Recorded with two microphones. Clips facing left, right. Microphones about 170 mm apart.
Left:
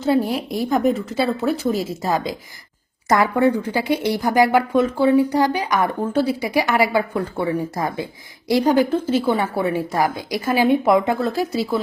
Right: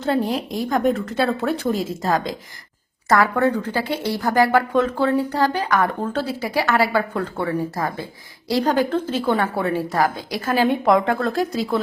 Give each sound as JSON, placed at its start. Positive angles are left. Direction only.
{"t": 0.0, "sound": "a woman's voice", "side_deg": 5}